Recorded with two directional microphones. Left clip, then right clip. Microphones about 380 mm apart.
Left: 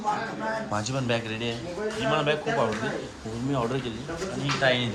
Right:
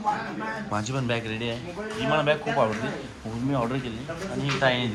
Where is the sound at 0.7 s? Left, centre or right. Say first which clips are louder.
Right 2 dB; centre.